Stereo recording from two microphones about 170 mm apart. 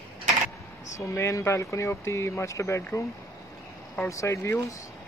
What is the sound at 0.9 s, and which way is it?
Speech, 15° left (ahead or behind).